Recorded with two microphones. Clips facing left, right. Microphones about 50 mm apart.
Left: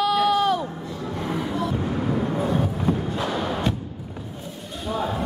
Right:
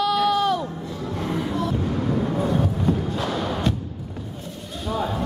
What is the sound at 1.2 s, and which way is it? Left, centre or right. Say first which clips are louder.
Vehicle: right 1 dB; centre.